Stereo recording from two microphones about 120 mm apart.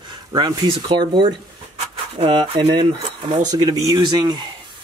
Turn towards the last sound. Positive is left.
turn(degrees=-35)  # may be behind; listen again after turning